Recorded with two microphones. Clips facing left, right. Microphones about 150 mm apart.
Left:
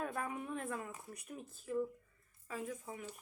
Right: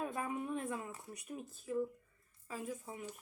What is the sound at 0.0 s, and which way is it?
Speech, 15° right (ahead or behind).